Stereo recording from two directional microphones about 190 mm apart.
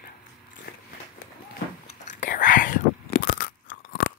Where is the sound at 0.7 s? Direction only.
50° left (ahead or behind).